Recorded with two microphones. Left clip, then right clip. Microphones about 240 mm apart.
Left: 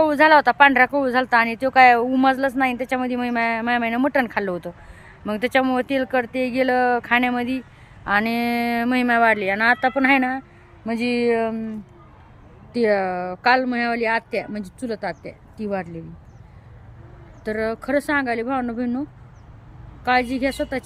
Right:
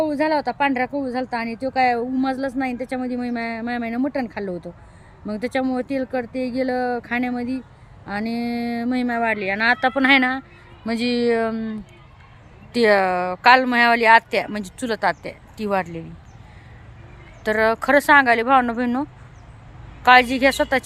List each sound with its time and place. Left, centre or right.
0.1 s speech: centre
11.1 s speech: right
12.7 s speech: centre
17.4 s speech: centre